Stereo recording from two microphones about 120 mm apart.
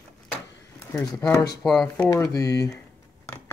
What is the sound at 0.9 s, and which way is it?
Speech, 30° left (ahead or behind).